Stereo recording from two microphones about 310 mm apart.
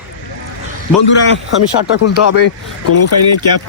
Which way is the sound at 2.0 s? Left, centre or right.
Left.